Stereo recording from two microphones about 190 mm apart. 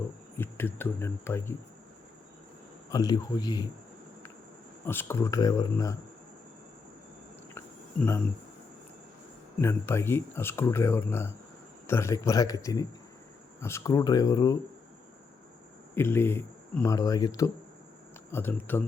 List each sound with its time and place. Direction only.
0.3 s speech: 10° left (ahead or behind)
2.9 s speech: 20° left (ahead or behind)
4.9 s speech: 10° left (ahead or behind)
9.6 s speech: 10° left (ahead or behind)
16.0 s speech: 10° left (ahead or behind)